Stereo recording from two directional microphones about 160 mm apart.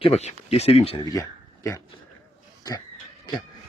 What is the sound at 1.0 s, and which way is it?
Speech, 20° left (ahead or behind).